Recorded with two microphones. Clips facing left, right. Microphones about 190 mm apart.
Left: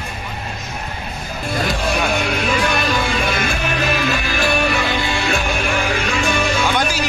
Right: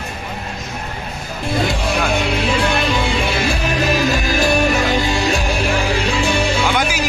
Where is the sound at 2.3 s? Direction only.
30° right (ahead or behind).